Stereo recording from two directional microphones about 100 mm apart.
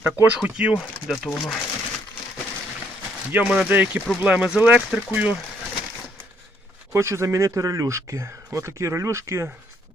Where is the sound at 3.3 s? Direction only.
15° right (ahead or behind).